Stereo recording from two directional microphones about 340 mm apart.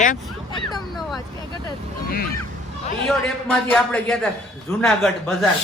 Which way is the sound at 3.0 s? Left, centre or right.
Centre.